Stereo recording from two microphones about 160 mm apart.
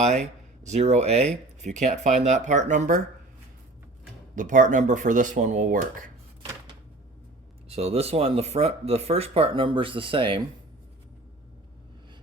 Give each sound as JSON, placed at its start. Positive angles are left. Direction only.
{"t": 0.6, "sound": "speech", "side_deg": -45}
{"t": 4.4, "sound": "speech", "side_deg": -50}
{"t": 7.7, "sound": "speech", "side_deg": -40}